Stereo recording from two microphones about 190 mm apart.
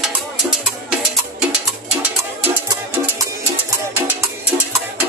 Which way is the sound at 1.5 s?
10° right (ahead or behind).